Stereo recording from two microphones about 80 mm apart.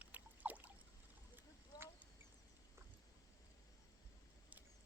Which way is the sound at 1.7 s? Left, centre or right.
Left.